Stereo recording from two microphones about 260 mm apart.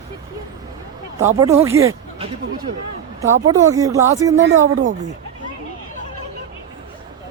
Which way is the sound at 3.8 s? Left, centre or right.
Centre.